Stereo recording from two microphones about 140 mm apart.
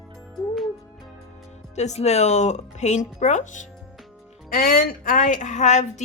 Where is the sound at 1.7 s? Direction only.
50° left (ahead or behind).